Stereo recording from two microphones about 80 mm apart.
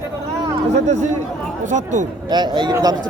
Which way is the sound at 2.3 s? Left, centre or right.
Right.